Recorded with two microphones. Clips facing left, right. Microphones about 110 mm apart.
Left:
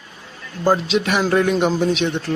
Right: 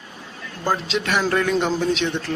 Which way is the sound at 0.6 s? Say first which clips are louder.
Left 6 dB; 15° left (ahead or behind).